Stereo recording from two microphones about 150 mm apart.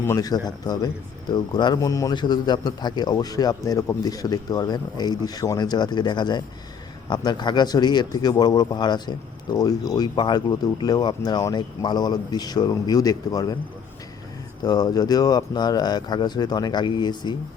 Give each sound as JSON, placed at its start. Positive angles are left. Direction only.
{"t": 0.0, "sound": "speech", "side_deg": 20}
{"t": 14.6, "sound": "speech", "side_deg": 25}